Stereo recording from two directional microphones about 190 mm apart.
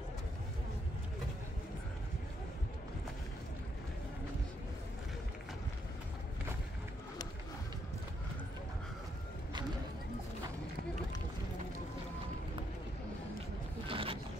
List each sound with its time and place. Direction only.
13.8 s zipper: 30° right (ahead or behind)